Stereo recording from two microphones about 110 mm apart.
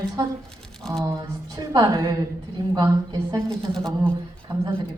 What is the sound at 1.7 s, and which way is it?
Speech, 30° right (ahead or behind).